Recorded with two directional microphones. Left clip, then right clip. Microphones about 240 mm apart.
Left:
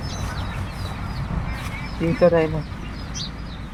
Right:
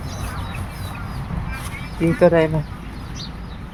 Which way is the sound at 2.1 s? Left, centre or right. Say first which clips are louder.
Right 2 dB; right.